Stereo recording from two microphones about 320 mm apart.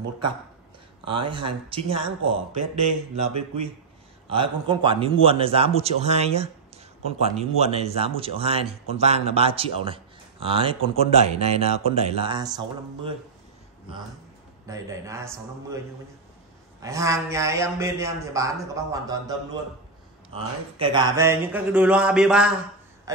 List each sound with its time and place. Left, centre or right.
1.0 s a man's voice: centre
4.3 s a man's voice: centre
14.7 s a man's voice: centre
16.8 s a man's voice: centre
20.3 s speech: centre
23.1 s a sound: centre